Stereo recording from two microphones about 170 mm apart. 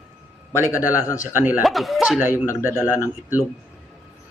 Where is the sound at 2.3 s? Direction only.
15° left (ahead or behind).